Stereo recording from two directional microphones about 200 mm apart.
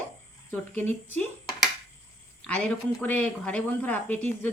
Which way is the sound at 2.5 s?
10° left (ahead or behind).